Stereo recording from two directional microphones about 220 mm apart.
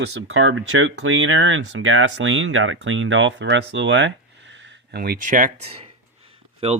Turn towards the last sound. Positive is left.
turn(degrees=-25)  # may be behind; listen again after turning